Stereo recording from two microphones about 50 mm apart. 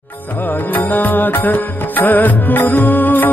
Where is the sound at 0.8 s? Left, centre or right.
Left.